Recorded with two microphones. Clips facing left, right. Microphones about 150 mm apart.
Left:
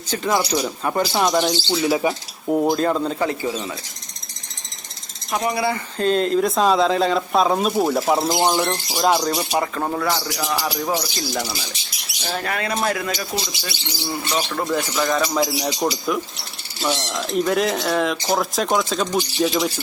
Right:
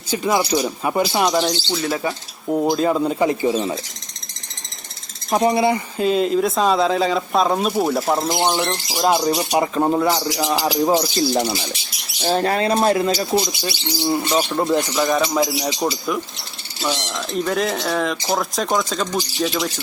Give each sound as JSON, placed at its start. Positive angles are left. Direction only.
{"t": 0.1, "sound": "speech", "side_deg": -10}
{"t": 1.3, "sound": "speech", "side_deg": 0}
{"t": 2.5, "sound": "speech", "side_deg": 0}
{"t": 5.3, "sound": "speech", "side_deg": -30}
{"t": 6.0, "sound": "speech", "side_deg": -5}
{"t": 9.5, "sound": "speech", "side_deg": -20}
{"t": 10.8, "sound": "speech", "side_deg": -30}
{"t": 15.3, "sound": "speech", "side_deg": 0}